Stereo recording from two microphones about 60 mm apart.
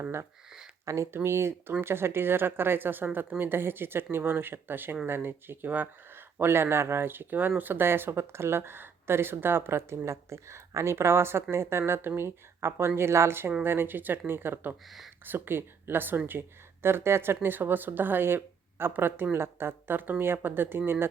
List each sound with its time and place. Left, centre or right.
0.9 s speech: right
14.8 s speech: centre
15.2 s speech: right